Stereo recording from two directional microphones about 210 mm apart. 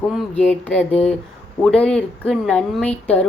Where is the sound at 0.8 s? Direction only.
30° left (ahead or behind).